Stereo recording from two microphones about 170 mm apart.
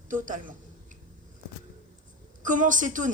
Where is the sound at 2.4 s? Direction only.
50° right (ahead or behind).